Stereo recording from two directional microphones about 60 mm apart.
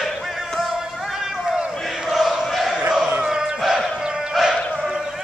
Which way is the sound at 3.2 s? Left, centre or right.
Centre.